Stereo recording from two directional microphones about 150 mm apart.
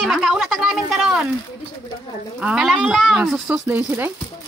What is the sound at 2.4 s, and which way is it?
Speech, 5° right (ahead or behind).